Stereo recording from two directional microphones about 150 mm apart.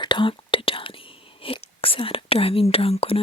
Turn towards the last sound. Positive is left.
turn(degrees=40)  # may be behind; listen again after turning